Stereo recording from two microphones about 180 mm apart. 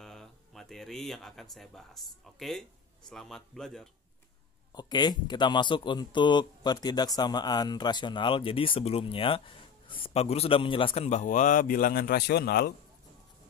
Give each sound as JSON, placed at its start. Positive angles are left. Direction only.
{"t": 0.0, "sound": "a man's voice", "side_deg": 0}
{"t": 4.7, "sound": "a man's voice", "side_deg": 25}